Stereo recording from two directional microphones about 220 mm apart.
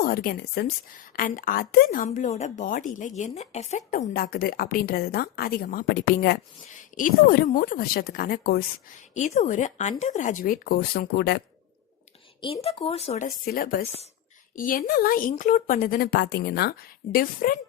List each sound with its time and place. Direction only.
0.0 s a woman's voice: 40° left (ahead or behind)
12.4 s speech: 25° left (ahead or behind)
13.2 s a woman's voice: 40° left (ahead or behind)
17.0 s a woman's voice: 35° left (ahead or behind)